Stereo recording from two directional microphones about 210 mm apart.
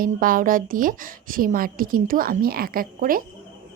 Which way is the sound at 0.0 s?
40° right (ahead or behind).